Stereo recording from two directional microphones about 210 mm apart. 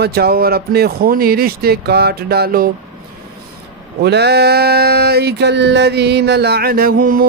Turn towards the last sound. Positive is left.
turn(degrees=-40)  # may be behind; listen again after turning